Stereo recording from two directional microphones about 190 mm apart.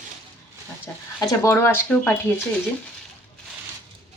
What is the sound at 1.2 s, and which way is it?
Speech, 15° left (ahead or behind).